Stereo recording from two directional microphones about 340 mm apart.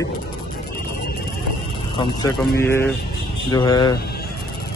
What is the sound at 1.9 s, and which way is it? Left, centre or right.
Speech, centre.